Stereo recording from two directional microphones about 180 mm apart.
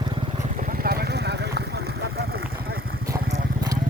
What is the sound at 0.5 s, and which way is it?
Vehicle, 50° right (ahead or behind).